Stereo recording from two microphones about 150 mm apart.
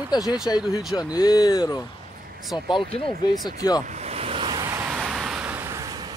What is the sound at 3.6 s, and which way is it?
Speech, 25° left (ahead or behind).